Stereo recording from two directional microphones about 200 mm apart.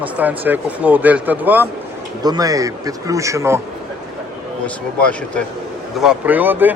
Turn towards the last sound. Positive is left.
turn(degrees=-10)  # may be behind; listen again after turning